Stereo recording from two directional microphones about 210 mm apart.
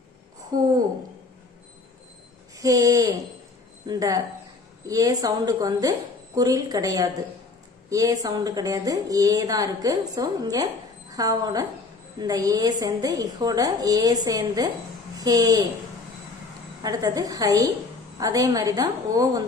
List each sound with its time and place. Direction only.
0.5 s a woman's voice: 20° right (ahead or behind)
2.6 s a woman's voice: 15° right (ahead or behind)
16.8 s a woman's voice: 15° right (ahead or behind)